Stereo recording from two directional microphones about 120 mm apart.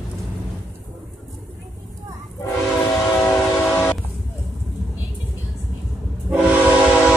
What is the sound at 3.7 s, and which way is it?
Train, 15° left (ahead or behind).